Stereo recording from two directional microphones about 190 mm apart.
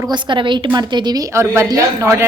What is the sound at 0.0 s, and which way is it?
A woman's voice, 25° right (ahead or behind).